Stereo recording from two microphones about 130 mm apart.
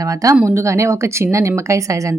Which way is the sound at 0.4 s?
20° right (ahead or behind).